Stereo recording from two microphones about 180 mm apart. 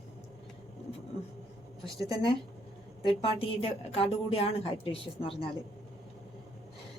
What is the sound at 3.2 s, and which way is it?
A woman's voice, 30° left (ahead or behind).